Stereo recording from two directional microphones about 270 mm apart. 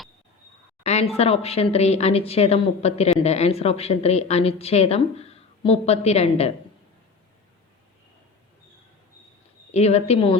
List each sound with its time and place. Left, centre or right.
0.9 s a woman's voice: left
9.7 s a woman's voice: left